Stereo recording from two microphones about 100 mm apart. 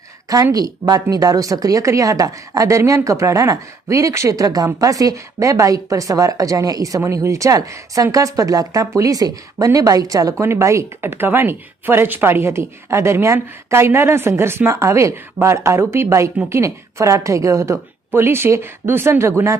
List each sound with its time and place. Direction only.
0.5 s a woman's voice: 40° right (ahead or behind)